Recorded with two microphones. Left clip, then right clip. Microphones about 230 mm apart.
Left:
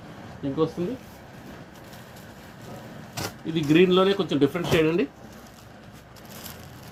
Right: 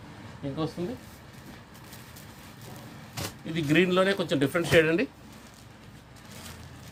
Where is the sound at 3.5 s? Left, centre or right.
Right.